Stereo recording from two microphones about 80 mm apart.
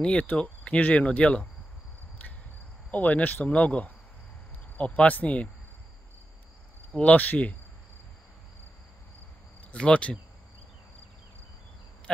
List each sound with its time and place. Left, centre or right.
0.0 s speech: centre
2.9 s speech: centre
6.9 s speech: centre
9.6 s speech: centre